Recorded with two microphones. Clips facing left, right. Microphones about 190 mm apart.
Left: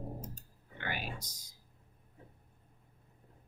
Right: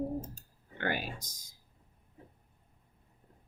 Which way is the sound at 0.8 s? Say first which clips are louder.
Right 7 dB; 45° right (ahead or behind).